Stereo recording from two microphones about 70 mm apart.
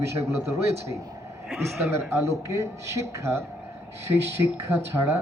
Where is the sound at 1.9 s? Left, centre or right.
Right.